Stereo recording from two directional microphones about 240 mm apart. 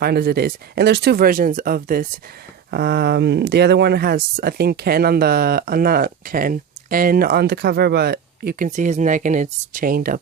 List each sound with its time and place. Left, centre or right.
0.0 s speech: right